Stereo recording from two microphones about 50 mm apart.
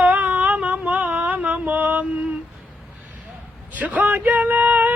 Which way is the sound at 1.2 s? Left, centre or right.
Right.